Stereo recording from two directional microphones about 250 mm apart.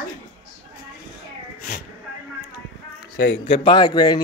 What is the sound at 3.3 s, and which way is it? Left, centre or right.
Speech, left.